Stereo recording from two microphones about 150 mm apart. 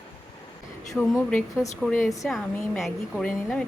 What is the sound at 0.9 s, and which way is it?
A woman's voice, 10° left (ahead or behind).